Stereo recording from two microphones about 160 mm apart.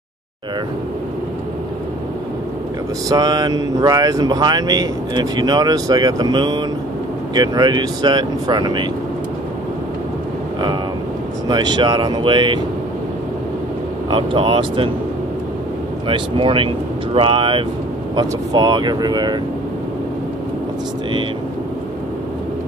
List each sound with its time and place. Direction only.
3.1 s speech: 25° right (ahead or behind)
11.4 s speech: 25° right (ahead or behind)
14.1 s speech: 30° right (ahead or behind)
16.1 s speech: 35° right (ahead or behind)